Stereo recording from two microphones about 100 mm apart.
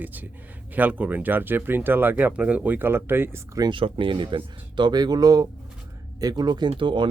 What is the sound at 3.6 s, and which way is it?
Speech, 55° right (ahead or behind).